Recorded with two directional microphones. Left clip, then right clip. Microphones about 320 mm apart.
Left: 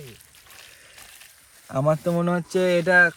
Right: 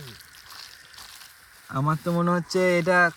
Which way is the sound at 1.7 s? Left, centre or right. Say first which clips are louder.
Left 5 dB; centre.